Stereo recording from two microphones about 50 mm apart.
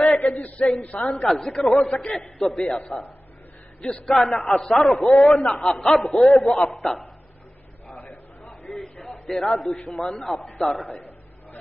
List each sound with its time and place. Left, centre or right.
0.0 s a sound: centre
0.4 s a man's voice: left
1.0 s a man's voice: centre
4.0 s a man's voice: centre
9.1 s a sound: centre
9.8 s a man's voice: centre